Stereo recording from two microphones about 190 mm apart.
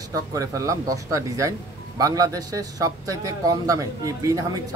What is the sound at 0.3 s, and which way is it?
A man's voice, 15° right (ahead or behind).